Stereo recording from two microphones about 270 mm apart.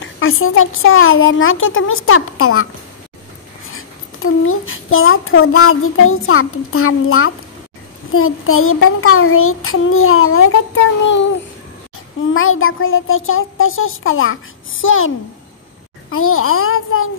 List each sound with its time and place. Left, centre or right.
0.0 s a child's voice: left
12.4 s a child's voice: left